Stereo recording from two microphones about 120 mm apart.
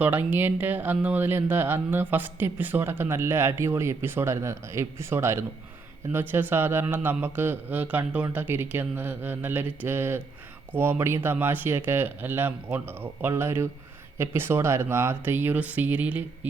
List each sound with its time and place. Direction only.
0.0 s a man's voice: 15° right (ahead or behind)